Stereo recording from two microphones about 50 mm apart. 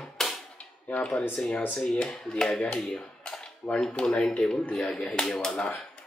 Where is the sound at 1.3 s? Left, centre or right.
Left.